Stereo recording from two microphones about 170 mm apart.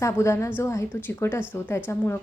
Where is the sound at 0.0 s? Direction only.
15° left (ahead or behind).